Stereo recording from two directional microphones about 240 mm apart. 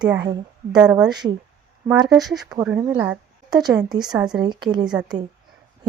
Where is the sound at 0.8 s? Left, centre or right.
Centre.